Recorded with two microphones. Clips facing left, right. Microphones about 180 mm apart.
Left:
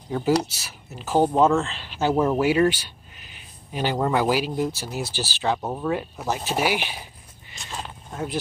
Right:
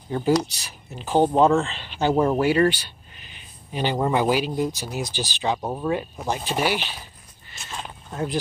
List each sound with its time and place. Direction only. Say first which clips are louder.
0.1 s speech: right 1 dB; 5° left (ahead or behind)
4.6 s speech: right 1 dB; 15° right (ahead or behind); by 7.0 s 10° left (ahead or behind)
8.1 s speech: right 3 dB; centre (ahead or behind)